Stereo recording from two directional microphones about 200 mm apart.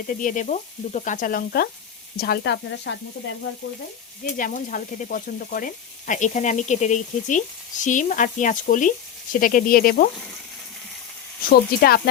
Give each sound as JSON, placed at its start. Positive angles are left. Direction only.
{"t": 0.1, "sound": "speech", "side_deg": 40}
{"t": 2.1, "sound": "frying", "side_deg": 50}
{"t": 4.2, "sound": "speech", "side_deg": 45}
{"t": 9.3, "sound": "sizzle", "side_deg": 45}
{"t": 11.4, "sound": "sizzle", "side_deg": 50}